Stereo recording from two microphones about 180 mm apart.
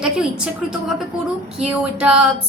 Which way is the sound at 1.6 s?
5° right (ahead or behind).